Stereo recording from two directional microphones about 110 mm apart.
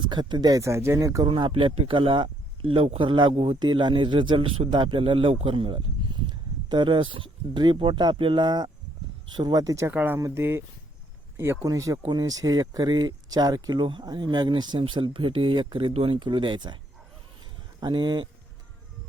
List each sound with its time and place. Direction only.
0.0 s speech: 45° right (ahead or behind); by 1.2 s 30° right (ahead or behind)
1.2 s speech: 50° right (ahead or behind); by 9.9 s 30° right (ahead or behind)
9.9 s speech: 15° right (ahead or behind)
10.2 s speech: 25° right (ahead or behind)
11.6 s speech: 30° right (ahead or behind)
17.7 s speech: 45° right (ahead or behind)